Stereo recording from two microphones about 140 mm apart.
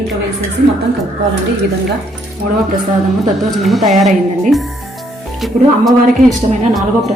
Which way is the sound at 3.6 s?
Centre (ahead or behind).